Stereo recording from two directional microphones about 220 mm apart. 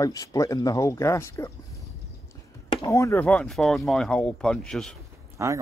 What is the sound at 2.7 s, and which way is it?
Speech, 15° left (ahead or behind).